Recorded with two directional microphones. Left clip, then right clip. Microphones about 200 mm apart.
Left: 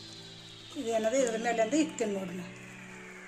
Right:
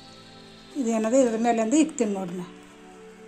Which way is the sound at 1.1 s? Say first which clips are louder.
Right 7 dB; 40° right (ahead or behind).